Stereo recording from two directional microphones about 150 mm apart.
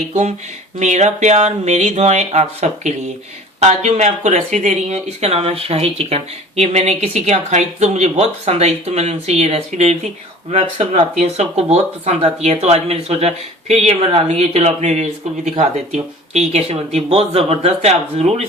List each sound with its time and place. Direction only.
0.1 s speech: 45° right (ahead or behind)